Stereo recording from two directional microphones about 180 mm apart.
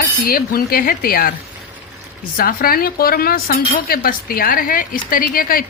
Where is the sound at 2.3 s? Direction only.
55° left (ahead or behind).